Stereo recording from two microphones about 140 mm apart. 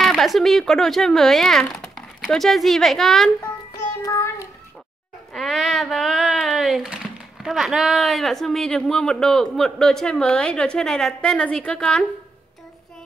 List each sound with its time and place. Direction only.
0.0 s speech: centre (ahead or behind)
4.0 s child singing: 20° left (ahead or behind)
5.3 s speech: centre (ahead or behind)